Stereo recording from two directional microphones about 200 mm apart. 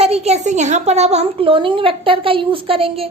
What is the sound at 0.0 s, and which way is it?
A woman's voice, 30° right (ahead or behind).